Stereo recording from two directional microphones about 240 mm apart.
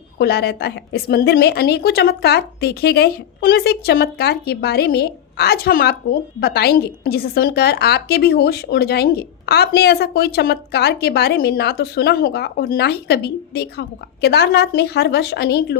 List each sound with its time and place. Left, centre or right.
0.2 s a woman's voice: left